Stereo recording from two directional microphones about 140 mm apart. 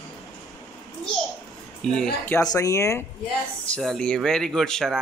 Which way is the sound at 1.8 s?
5° left (ahead or behind).